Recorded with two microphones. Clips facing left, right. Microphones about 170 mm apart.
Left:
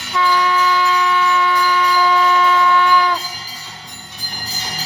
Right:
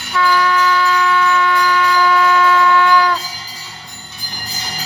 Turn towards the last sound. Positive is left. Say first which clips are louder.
# right 2 dB
turn(degrees=15)  # may be behind; listen again after turning